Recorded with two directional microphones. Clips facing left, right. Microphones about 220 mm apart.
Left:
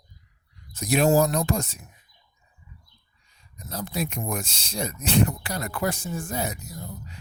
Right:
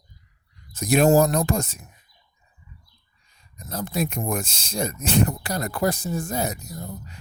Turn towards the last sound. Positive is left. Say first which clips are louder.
# right 3 dB
turn(degrees=-40)  # may be behind; listen again after turning